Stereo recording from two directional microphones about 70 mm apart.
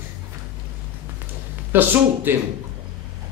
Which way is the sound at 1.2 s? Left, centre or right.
Right.